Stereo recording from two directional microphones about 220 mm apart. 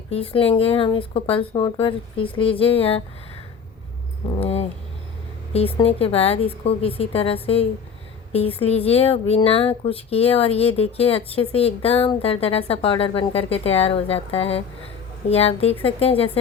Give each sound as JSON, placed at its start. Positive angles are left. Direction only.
{"t": 0.1, "sound": "a woman's voice", "side_deg": 25}
{"t": 4.4, "sound": "a woman's voice", "side_deg": 30}